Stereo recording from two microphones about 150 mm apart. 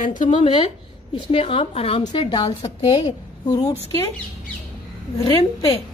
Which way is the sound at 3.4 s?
25° left (ahead or behind).